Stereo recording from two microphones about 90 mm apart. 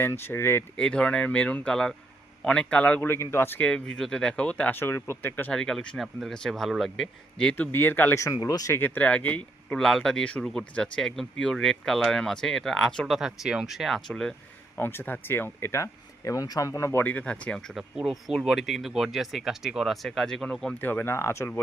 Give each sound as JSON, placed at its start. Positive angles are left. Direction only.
{"t": 0.0, "sound": "speech", "side_deg": 25}
{"t": 0.8, "sound": "speech", "side_deg": 10}
{"t": 3.6, "sound": "speech", "side_deg": 10}
{"t": 5.5, "sound": "speech", "side_deg": 5}
{"t": 7.5, "sound": "speech", "side_deg": 20}
{"t": 8.1, "sound": "speech", "side_deg": 35}
{"t": 8.8, "sound": "speech", "side_deg": 15}
{"t": 9.7, "sound": "speech", "side_deg": 5}
{"t": 14.8, "sound": "speech", "side_deg": 25}
{"t": 17.0, "sound": "speech", "side_deg": 20}
{"t": 17.7, "sound": "speech", "side_deg": -5}
{"t": 20.7, "sound": "speech", "side_deg": 20}